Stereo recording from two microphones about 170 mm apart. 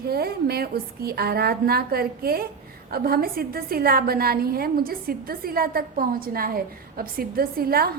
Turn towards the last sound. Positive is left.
turn(degrees=-60)  # may be behind; listen again after turning